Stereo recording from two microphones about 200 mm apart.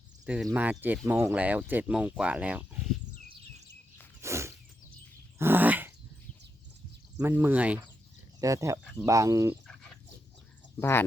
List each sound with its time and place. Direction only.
0.4 s speech: 10° right (ahead or behind)
4.2 s a sound: 15° right (ahead or behind)
7.2 s speech: 10° right (ahead or behind)
10.8 s speech: 10° left (ahead or behind)